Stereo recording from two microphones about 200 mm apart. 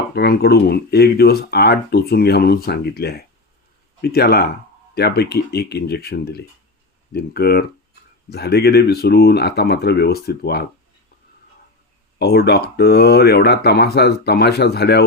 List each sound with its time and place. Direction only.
0.1 s speech: 50° left (ahead or behind)
12.2 s speech: 55° left (ahead or behind)